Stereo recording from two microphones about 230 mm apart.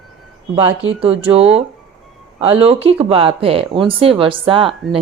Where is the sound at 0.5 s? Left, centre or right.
Right.